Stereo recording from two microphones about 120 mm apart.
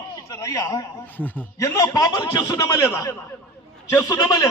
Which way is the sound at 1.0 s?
15° left (ahead or behind).